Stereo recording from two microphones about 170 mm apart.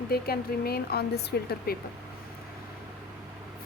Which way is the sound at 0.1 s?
65° left (ahead or behind).